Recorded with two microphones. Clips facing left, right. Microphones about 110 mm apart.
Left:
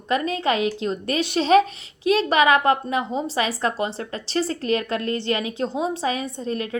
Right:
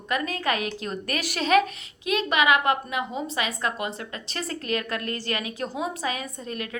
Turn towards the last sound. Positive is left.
turn(degrees=30)  # may be behind; listen again after turning